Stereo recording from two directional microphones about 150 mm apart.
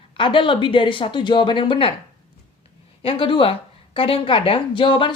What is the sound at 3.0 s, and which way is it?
Speech, 35° left (ahead or behind).